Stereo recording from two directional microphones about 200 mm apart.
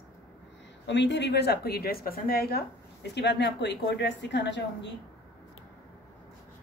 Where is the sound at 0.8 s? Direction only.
60° left (ahead or behind).